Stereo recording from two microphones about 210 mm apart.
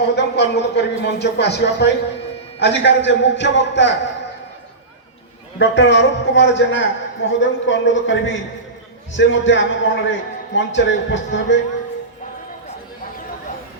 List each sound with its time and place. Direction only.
0.0 s a man's voice: 55° left (ahead or behind)
5.5 s a man's voice: 55° left (ahead or behind)